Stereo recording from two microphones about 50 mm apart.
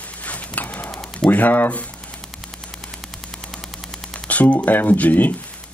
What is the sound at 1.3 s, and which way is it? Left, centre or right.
Speech, left.